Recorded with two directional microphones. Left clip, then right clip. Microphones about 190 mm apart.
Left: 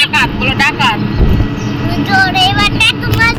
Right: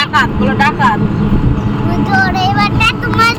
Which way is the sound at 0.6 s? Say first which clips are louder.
Even; 15° right (ahead or behind).